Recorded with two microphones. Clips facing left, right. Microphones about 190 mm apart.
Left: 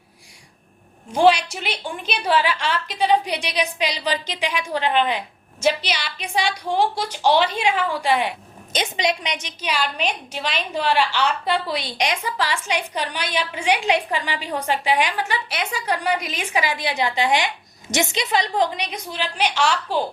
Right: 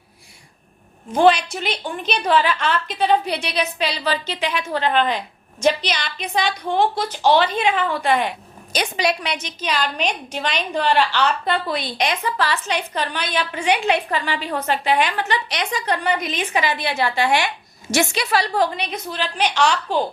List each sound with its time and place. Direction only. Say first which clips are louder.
1.1 s a woman's voice: right 1 dB; 10° left (ahead or behind)
8.7 s a woman's voice: right 1 dB; 20° left (ahead or behind); by 19.8 s 5° left (ahead or behind)